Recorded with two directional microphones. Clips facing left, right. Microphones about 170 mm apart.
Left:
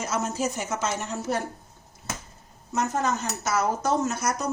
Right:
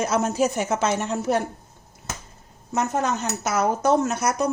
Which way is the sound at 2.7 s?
60° right (ahead or behind).